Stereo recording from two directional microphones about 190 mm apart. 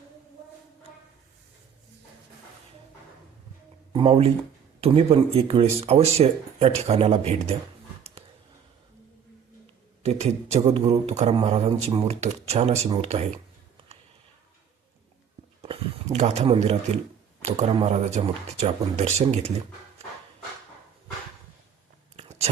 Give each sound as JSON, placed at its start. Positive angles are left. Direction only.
{"t": 3.9, "sound": "speech", "side_deg": -30}
{"t": 10.0, "sound": "speech", "side_deg": -35}
{"t": 15.6, "sound": "speech", "side_deg": -30}
{"t": 22.1, "sound": "a sound", "side_deg": -35}